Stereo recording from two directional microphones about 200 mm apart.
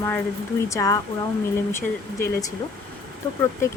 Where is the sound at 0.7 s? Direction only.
15° left (ahead or behind).